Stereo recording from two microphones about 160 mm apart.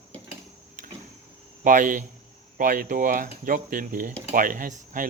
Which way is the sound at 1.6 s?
55° right (ahead or behind).